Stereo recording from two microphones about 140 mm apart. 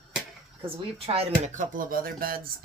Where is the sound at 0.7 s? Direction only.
45° right (ahead or behind); by 2.4 s 90° right.